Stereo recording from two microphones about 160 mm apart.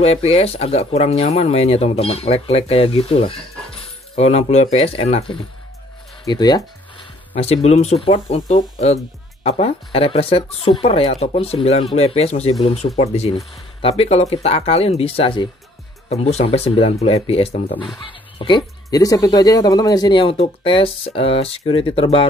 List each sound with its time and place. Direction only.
0.0 s speech: 40° left (ahead or behind)
6.2 s a sound: 25° left (ahead or behind)
7.3 s speech: 40° left (ahead or behind)
8.5 s speech: 50° left (ahead or behind)
18.4 s speech: 25° left (ahead or behind)